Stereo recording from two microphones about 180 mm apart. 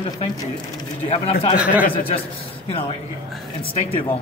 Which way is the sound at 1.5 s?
5° right (ahead or behind).